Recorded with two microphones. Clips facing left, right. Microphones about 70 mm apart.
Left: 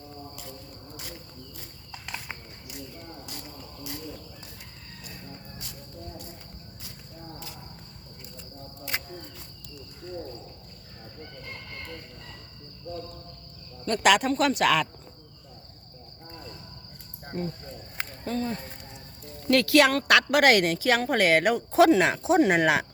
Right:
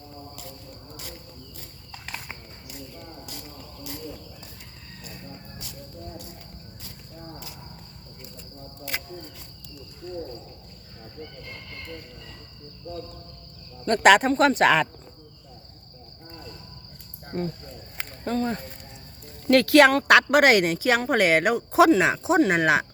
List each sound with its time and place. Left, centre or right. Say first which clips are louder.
13.8 s speech: right 5 dB; right
17.3 s speech: right 3 dB; right
20.1 s a woman's voice: right 3 dB; right
21.4 s speech: right 1 dB; centre